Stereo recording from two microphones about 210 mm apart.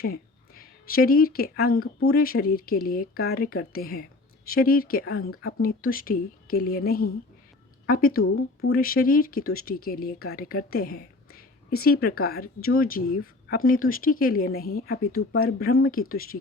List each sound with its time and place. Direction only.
0.0 s speech: 45° left (ahead or behind)